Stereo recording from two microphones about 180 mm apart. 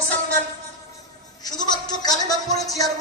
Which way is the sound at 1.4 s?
20° left (ahead or behind).